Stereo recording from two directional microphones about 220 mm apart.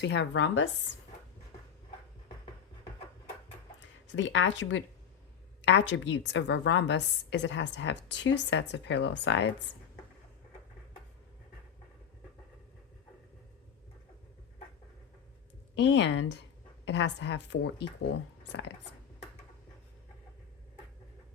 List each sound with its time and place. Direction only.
0.0 s speech: 50° left (ahead or behind)
3.8 s a woman's voice: 55° left (ahead or behind)
15.7 s a woman's voice: 55° left (ahead or behind)